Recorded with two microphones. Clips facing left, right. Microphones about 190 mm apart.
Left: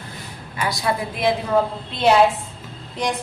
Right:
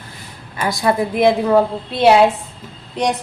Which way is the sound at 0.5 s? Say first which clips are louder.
Right 6 dB; 50° right (ahead or behind).